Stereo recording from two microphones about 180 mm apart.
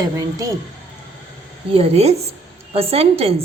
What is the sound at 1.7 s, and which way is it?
A woman's voice, 35° right (ahead or behind).